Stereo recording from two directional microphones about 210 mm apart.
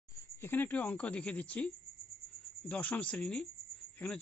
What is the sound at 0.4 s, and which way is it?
Speech, 10° left (ahead or behind).